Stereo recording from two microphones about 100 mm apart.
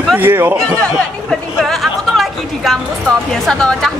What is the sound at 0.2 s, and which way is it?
Speech, 20° right (ahead or behind).